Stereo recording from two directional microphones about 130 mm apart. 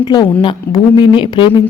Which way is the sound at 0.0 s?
35° left (ahead or behind).